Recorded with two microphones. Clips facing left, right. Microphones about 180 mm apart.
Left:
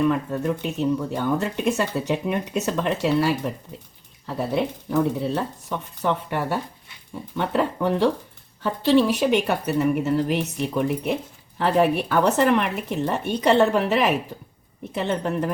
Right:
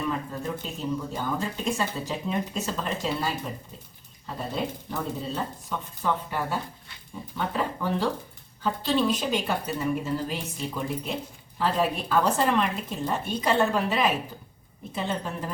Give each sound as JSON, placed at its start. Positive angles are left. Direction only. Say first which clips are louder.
{"t": 0.1, "sound": "speech", "louder": "left 7 dB", "side_deg": 70}